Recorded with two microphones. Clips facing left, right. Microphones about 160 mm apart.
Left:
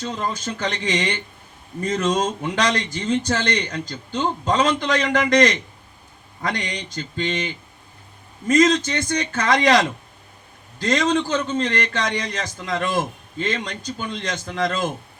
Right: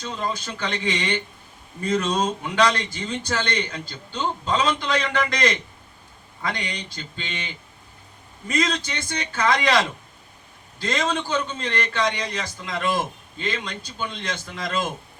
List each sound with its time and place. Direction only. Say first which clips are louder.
0.0 s a man's voice: left 2 dB; 40° left (ahead or behind)
6.4 s a man's voice: left 3 dB; 45° left (ahead or behind)